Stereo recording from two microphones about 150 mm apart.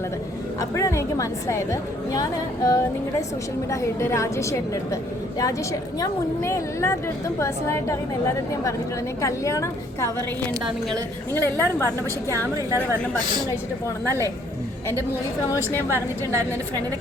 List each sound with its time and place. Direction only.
0.6 s a woman's voice: 20° left (ahead or behind)
6.0 s a woman's voice: 20° left (ahead or behind)
9.2 s a woman's voice: 20° left (ahead or behind)
11.3 s a woman's voice: 15° left (ahead or behind)
12.3 s a woman's voice: 20° right (ahead or behind)
14.0 s a woman's voice: 15° left (ahead or behind)
15.9 s a woman's voice: 20° right (ahead or behind)